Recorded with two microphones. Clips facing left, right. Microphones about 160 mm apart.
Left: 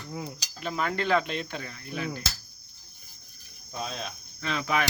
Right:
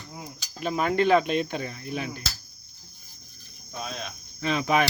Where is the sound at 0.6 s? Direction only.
20° right (ahead or behind).